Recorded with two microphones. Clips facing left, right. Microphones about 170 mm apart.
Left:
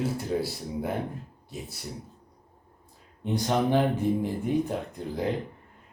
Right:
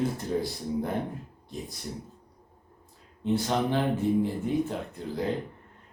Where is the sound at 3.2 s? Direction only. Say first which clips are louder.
Left 1 dB; 15° left (ahead or behind).